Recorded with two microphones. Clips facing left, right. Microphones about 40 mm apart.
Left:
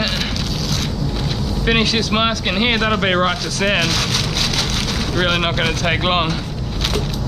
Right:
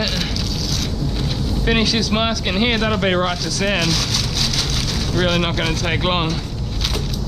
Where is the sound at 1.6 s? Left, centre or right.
Centre.